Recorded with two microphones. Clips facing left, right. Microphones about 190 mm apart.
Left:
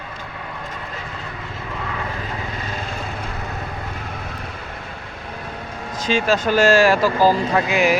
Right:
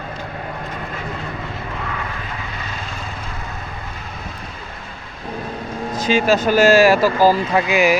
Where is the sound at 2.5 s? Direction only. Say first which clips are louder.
Left 2 dB; 45° left (ahead or behind).